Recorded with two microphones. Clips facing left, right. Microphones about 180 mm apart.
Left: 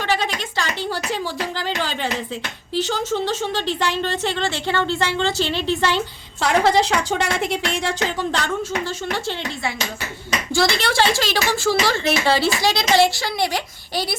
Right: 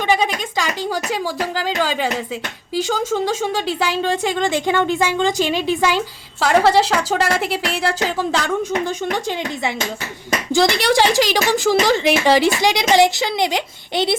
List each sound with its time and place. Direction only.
0.0 s a woman's voice: 10° right (ahead or behind)
10.5 s speech: 15° right (ahead or behind)